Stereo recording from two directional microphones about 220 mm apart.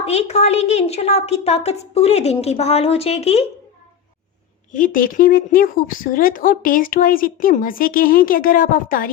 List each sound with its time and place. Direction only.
0.0 s a woman's voice: 30° left (ahead or behind)
4.7 s speech: 35° left (ahead or behind)